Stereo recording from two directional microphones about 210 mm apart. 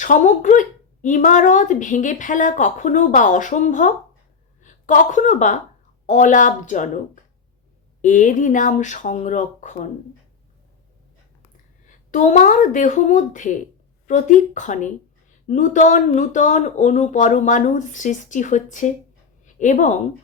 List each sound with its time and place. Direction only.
0.0 s a woman's voice: 35° left (ahead or behind)
8.0 s speech: 35° left (ahead or behind)
11.5 s speech: 35° left (ahead or behind)